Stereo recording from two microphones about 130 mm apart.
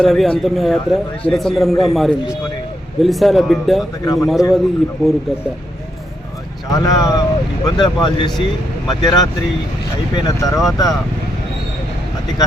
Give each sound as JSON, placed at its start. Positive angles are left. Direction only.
{"t": 0.0, "sound": "a man's voice", "side_deg": 0}
{"t": 4.0, "sound": "speech", "side_deg": 25}
{"t": 4.3, "sound": "a man's voice", "side_deg": 0}
{"t": 6.7, "sound": "speech", "side_deg": 30}